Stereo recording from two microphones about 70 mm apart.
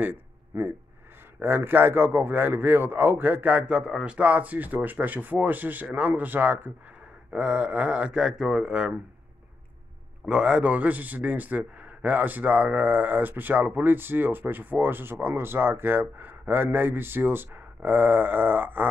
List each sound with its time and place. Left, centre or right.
0.0 s a sound: right
1.4 s a man's voice: right
3.7 s a man's voice: centre; by 6.7 s right
7.3 s speech: centre
10.2 s a man's voice: centre